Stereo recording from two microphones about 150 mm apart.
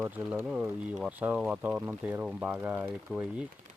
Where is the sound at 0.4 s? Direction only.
5° right (ahead or behind).